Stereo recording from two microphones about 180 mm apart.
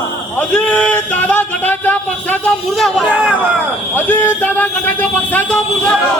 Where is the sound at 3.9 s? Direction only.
10° left (ahead or behind).